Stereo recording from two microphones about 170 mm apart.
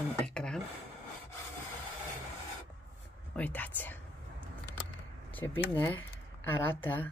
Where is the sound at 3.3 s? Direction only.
10° left (ahead or behind).